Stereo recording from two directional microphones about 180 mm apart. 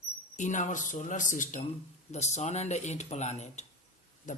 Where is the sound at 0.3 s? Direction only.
45° left (ahead or behind).